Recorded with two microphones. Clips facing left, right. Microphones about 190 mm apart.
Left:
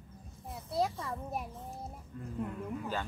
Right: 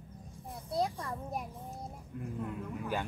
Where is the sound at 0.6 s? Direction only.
5° left (ahead or behind).